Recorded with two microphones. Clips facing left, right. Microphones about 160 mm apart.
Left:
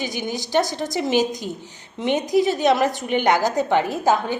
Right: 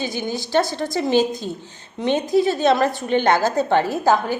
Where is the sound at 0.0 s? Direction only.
20° left (ahead or behind).